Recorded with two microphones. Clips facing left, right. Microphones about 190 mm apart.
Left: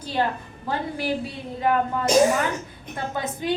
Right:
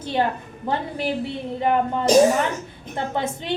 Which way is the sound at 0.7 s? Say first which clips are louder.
Right 1 dB; 20° right (ahead or behind).